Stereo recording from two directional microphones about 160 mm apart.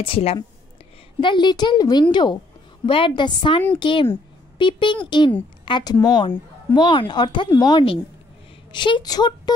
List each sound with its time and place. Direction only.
0.0 s a woman's voice: 35° left (ahead or behind)